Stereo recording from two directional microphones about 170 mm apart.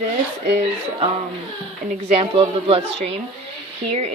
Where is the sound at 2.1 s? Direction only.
30° right (ahead or behind).